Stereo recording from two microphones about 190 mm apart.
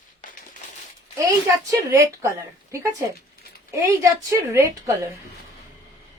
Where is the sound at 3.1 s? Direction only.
55° left (ahead or behind).